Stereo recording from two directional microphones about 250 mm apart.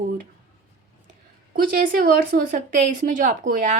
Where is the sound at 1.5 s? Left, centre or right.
Right.